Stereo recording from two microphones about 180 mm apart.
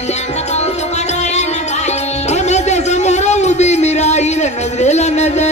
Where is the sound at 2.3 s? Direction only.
40° left (ahead or behind).